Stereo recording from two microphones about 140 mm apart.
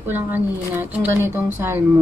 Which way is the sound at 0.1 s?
15° right (ahead or behind).